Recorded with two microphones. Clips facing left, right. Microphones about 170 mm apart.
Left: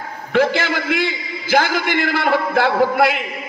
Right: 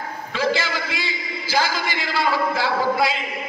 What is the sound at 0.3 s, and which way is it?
A man's voice, 60° left (ahead or behind).